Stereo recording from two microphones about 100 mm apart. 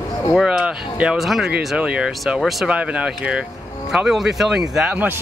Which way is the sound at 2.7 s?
15° right (ahead or behind).